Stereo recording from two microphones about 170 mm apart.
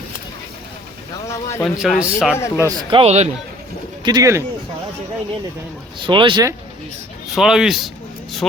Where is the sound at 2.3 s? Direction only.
15° left (ahead or behind).